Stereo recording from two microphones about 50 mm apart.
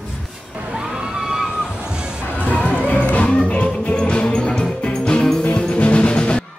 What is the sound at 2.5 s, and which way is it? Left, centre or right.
Music, left.